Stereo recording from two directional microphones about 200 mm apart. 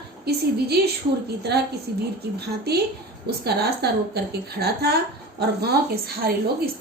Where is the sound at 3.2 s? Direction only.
55° right (ahead or behind).